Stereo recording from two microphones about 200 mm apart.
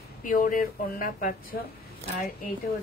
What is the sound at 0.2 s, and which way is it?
A woman's voice, 40° left (ahead or behind).